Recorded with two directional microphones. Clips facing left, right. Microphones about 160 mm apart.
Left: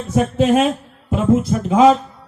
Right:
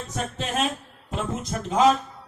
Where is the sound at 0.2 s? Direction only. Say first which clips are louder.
Left 13 dB; 55° left (ahead or behind).